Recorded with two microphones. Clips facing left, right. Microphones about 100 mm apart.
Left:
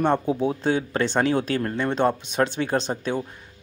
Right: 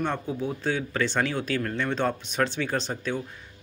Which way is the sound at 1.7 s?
20° left (ahead or behind).